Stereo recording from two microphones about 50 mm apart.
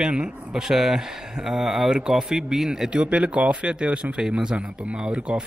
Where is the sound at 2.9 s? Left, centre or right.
Right.